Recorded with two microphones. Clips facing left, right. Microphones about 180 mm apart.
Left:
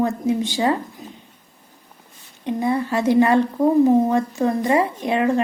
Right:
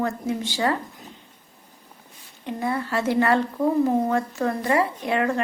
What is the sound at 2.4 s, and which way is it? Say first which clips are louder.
A woman's voice: left 5 dB; 20° left (ahead or behind).